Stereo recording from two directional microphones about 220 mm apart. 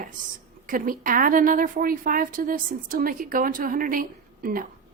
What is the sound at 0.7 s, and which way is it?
A woman's voice, 40° right (ahead or behind).